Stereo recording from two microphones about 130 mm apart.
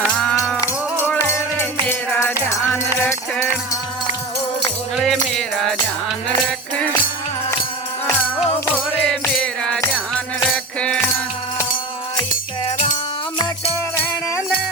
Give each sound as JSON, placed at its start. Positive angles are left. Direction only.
{"t": 0.2, "sound": "music", "side_deg": 5}
{"t": 1.0, "sound": "music", "side_deg": 20}
{"t": 4.9, "sound": "music", "side_deg": 5}
{"t": 9.2, "sound": "music", "side_deg": 5}
{"t": 12.6, "sound": "music", "side_deg": 55}